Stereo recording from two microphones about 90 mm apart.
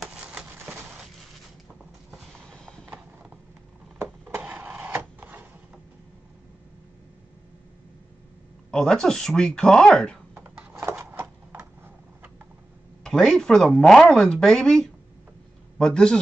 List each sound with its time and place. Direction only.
0.3 s a sound: 15° right (ahead or behind)
2.5 s clip-clop: 10° left (ahead or behind)
4.0 s wood: 20° right (ahead or behind)
8.7 s speech: 5° left (ahead or behind)
10.3 s a sound: 20° right (ahead or behind)
13.0 s a man's voice: 5° left (ahead or behind)